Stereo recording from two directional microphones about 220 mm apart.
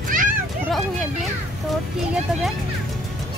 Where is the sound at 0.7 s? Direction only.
Centre (ahead or behind).